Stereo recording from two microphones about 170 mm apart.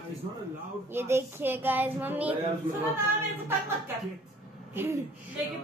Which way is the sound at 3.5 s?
15° right (ahead or behind).